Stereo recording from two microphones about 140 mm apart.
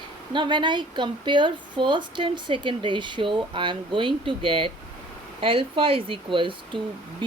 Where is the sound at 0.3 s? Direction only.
35° right (ahead or behind).